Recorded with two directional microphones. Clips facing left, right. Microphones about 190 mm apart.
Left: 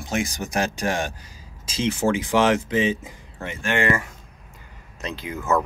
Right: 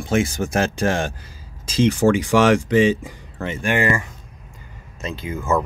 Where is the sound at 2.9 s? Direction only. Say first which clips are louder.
Right 5 dB; 80° right.